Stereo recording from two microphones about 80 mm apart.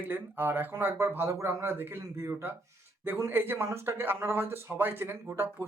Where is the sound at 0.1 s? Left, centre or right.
Right.